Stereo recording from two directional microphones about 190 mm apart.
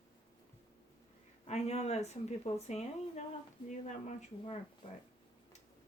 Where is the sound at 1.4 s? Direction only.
35° left (ahead or behind).